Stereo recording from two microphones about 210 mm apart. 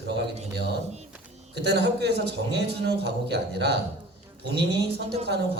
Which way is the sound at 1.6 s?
50° right (ahead or behind).